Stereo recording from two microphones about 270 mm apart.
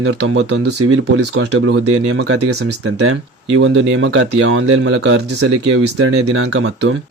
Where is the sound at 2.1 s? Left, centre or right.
Right.